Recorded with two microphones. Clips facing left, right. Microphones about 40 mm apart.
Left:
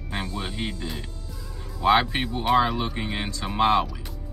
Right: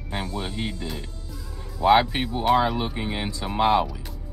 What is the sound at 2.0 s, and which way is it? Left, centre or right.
Speech, centre.